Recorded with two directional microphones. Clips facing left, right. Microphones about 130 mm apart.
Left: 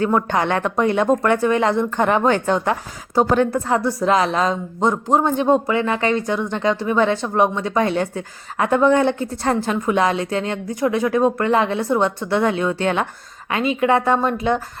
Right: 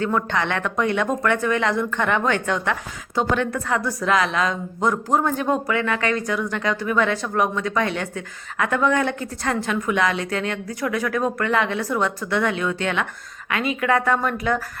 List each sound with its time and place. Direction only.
0.0 s a woman's voice: 30° left (ahead or behind)